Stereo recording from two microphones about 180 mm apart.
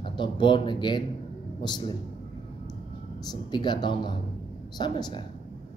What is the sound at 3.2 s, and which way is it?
Speech, 25° left (ahead or behind).